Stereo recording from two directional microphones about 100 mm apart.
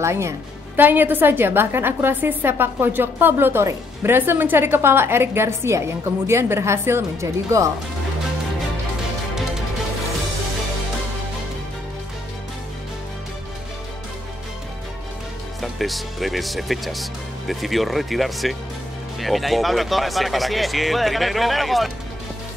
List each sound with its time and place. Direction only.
0.0 s a woman's voice: 30° right (ahead or behind)
15.6 s speech: centre (ahead or behind)